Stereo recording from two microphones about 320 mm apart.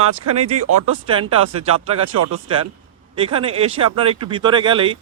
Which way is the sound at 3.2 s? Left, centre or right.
Centre.